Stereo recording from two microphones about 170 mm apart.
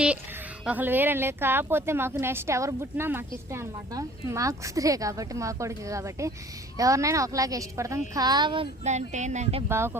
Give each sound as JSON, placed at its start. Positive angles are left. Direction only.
{"t": 0.6, "sound": "a woman's voice", "side_deg": -10}
{"t": 8.8, "sound": "speech", "side_deg": -40}
{"t": 9.6, "sound": "speech", "side_deg": -15}